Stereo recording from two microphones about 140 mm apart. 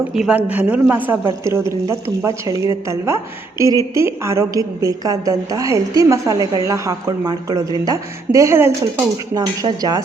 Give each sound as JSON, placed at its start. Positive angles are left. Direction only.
{"t": 0.1, "sound": "a woman's voice", "side_deg": -5}